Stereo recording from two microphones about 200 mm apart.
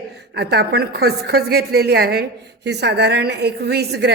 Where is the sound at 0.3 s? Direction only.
55° right (ahead or behind).